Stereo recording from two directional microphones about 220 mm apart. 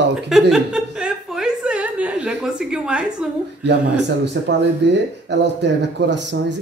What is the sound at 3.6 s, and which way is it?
A man's voice, 50° right (ahead or behind).